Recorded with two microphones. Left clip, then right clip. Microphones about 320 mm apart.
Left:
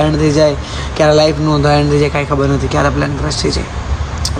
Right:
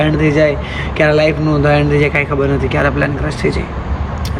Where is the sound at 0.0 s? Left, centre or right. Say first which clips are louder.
Left 1 dB; centre.